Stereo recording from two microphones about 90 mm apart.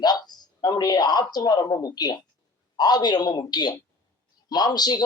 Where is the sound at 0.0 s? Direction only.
50° left (ahead or behind).